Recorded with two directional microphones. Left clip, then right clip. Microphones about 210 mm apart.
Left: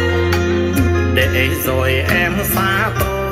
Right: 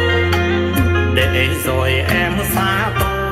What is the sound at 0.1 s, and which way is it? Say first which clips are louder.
Music: right 1 dB; centre (ahead or behind).